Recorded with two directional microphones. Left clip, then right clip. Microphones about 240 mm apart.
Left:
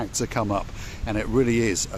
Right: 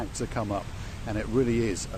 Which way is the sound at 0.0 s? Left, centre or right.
Left.